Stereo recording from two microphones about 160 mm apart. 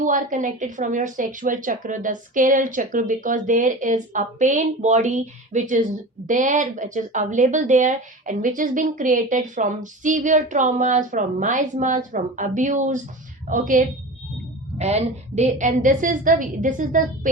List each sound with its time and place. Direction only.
0.0 s a woman's voice: 55° right (ahead or behind)
14.8 s speech: 40° right (ahead or behind)